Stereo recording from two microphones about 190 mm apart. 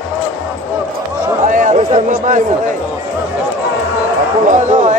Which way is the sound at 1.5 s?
40° right (ahead or behind).